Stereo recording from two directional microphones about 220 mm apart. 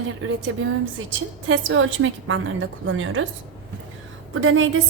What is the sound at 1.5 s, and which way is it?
A woman's voice, 60° right (ahead or behind).